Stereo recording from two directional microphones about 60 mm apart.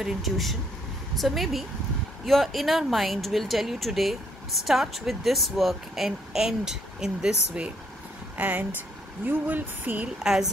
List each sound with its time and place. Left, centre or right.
0.0 s speech: centre
8.4 s speech: right
10.1 s a woman's voice: centre